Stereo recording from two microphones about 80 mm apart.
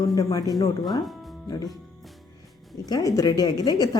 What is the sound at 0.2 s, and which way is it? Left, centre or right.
Speech, left.